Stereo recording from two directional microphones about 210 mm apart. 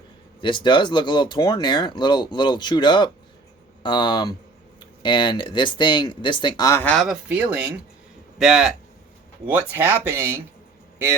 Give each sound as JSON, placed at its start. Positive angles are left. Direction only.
{"t": 0.4, "sound": "speech", "side_deg": 20}